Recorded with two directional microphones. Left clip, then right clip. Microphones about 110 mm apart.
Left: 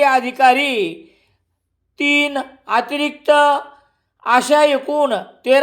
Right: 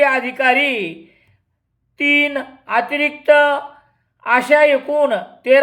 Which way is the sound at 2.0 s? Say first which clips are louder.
Right 1 dB; 35° left (ahead or behind).